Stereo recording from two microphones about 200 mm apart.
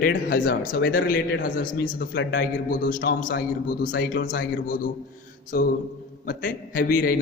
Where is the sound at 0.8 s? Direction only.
60° left (ahead or behind).